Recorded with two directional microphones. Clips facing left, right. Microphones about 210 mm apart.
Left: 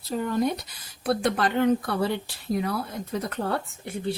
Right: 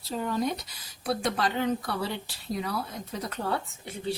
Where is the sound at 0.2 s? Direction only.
55° left (ahead or behind).